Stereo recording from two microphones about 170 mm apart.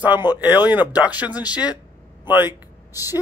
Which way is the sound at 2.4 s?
20° left (ahead or behind).